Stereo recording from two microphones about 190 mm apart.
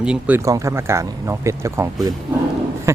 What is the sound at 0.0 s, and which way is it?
Speech, 5° right (ahead or behind).